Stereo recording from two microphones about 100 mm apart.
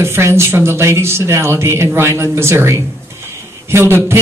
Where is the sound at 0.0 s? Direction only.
25° right (ahead or behind).